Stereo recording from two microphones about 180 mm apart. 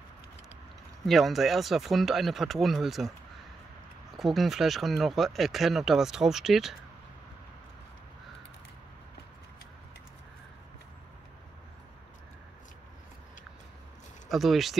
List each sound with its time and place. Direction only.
1.0 s speech: centre (ahead or behind)
4.2 s speech: centre (ahead or behind)
14.3 s speech: centre (ahead or behind)